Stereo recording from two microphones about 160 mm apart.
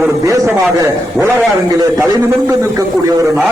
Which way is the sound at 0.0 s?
20° right (ahead or behind).